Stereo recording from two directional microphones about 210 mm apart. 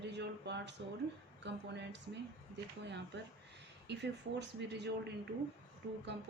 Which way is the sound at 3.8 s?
55° right (ahead or behind).